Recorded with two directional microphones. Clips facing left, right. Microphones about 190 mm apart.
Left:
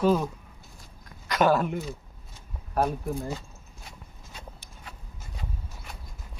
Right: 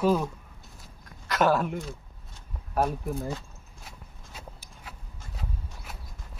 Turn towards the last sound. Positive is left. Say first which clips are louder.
# even
turn(degrees=-5)  # may be behind; listen again after turning